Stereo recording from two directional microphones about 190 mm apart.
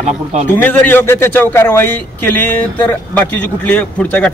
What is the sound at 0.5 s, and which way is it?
Speech, 10° left (ahead or behind).